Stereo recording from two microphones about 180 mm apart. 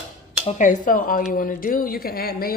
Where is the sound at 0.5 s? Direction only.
45° left (ahead or behind).